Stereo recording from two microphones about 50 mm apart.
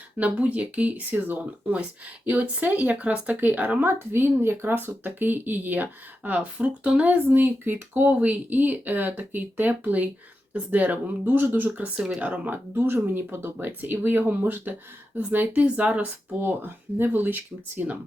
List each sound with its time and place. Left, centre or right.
0.2 s speech: right
3.8 s speech: right
11.7 s speech: centre
12.2 s speech: right
12.5 s speech: right
16.4 s speech: right